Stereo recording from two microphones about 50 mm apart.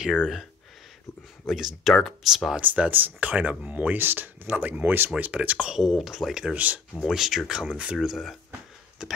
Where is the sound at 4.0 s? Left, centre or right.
Right.